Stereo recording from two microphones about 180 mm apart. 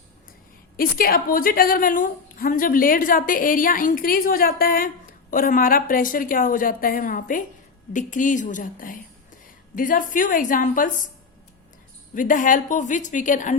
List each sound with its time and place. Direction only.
0.8 s a woman's voice: 55° left (ahead or behind)
12.1 s a woman's voice: 45° left (ahead or behind)